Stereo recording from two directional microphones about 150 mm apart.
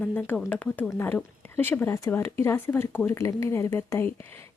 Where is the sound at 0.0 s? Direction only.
10° left (ahead or behind).